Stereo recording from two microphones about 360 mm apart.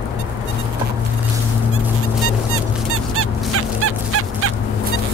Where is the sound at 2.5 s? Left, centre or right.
Right.